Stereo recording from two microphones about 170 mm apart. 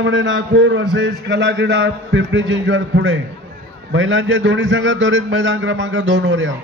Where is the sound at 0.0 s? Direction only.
90° right.